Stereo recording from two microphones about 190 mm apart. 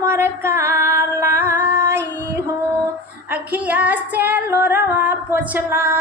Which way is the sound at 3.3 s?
10° right (ahead or behind).